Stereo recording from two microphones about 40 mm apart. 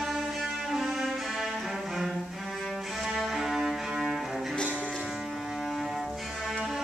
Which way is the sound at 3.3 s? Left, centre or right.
Centre.